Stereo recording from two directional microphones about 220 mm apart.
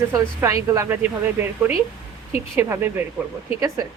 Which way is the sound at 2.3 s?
10° right (ahead or behind).